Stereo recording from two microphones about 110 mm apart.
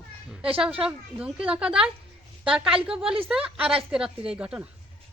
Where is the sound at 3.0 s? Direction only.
55° right (ahead or behind).